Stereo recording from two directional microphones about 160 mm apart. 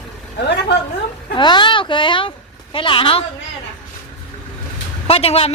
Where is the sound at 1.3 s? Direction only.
30° left (ahead or behind).